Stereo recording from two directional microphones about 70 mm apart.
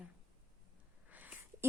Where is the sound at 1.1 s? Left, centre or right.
Right.